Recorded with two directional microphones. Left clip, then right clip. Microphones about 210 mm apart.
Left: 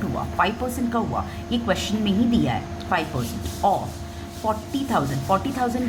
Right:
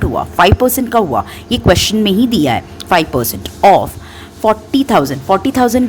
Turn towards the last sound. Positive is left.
turn(degrees=-45)  # may be behind; listen again after turning